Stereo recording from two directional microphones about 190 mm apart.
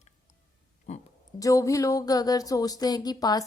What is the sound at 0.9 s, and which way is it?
Speech, 35° left (ahead or behind).